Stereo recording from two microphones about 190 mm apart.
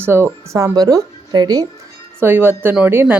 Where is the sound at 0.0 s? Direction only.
15° right (ahead or behind).